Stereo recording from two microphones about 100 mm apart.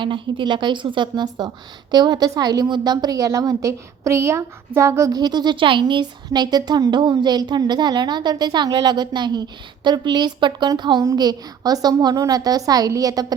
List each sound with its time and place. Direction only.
0.0 s a woman's voice: 55° right (ahead or behind)
5.8 s a woman's voice: 45° right (ahead or behind)